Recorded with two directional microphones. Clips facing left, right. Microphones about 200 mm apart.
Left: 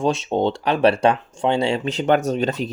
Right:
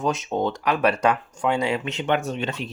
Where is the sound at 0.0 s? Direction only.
30° left (ahead or behind).